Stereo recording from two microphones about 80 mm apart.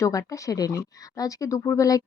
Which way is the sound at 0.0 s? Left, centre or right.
Left.